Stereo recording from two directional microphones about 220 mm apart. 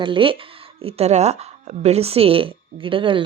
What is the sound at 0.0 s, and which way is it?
A woman's voice, 25° right (ahead or behind).